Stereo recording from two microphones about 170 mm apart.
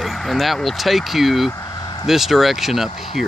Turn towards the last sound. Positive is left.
turn(degrees=0)  # may be behind; listen again after turning